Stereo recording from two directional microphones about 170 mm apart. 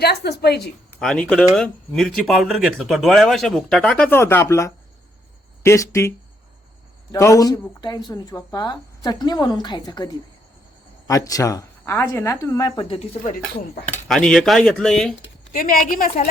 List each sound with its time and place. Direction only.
0.0 s a woman's voice: 70° left (ahead or behind)
0.9 s speech: 5° left (ahead or behind); by 13.0 s 30° left (ahead or behind)
14.1 s speech: 5° left (ahead or behind)
15.5 s a woman's voice: 55° left (ahead or behind)